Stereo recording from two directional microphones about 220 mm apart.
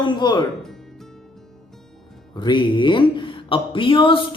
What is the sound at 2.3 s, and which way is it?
Speech, 20° left (ahead or behind).